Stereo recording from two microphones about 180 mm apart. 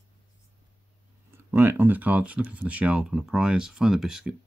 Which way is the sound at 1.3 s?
10° right (ahead or behind).